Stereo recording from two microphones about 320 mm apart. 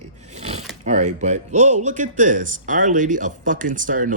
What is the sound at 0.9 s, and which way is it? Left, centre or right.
Speech, right.